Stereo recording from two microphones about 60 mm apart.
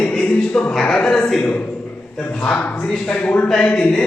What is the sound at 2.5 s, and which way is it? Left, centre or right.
Speech, left.